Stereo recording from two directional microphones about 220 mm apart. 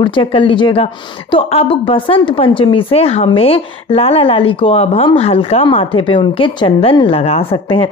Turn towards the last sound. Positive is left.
turn(degrees=25)  # may be behind; listen again after turning